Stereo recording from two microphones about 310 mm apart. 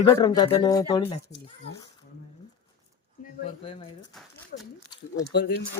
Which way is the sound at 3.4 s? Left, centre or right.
Centre.